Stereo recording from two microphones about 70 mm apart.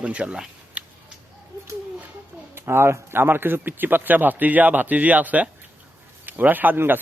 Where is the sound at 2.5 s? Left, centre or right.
Right.